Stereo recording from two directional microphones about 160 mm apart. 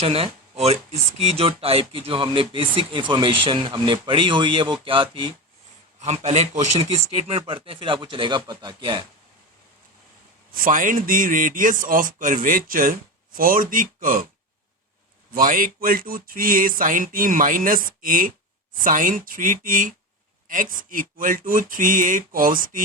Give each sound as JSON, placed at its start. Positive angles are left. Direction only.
{"t": 0.0, "sound": "speech", "side_deg": -40}
{"t": 6.0, "sound": "a man's voice", "side_deg": -45}
{"t": 7.3, "sound": "speech", "side_deg": -35}
{"t": 10.5, "sound": "speech", "side_deg": -60}
{"t": 15.4, "sound": "speech", "side_deg": -60}